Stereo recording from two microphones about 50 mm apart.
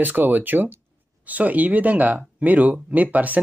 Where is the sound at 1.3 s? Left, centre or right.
Right.